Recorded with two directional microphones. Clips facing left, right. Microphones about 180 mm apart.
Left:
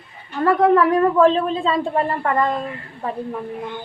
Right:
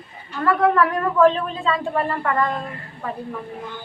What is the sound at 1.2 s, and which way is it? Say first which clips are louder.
Speech: left 2 dB; 30° left (ahead or behind).